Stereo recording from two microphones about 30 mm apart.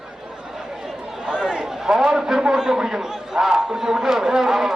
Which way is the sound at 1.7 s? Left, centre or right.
Centre.